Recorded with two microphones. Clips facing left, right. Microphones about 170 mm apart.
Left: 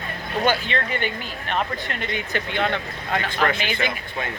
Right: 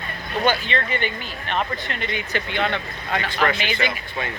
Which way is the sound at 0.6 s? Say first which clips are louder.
Right 1 dB; 45° left (ahead or behind).